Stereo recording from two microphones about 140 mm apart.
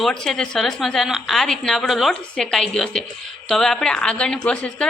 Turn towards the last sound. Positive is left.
turn(degrees=5)  # may be behind; listen again after turning